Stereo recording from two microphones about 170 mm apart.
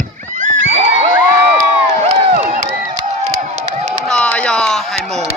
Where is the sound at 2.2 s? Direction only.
40° right (ahead or behind).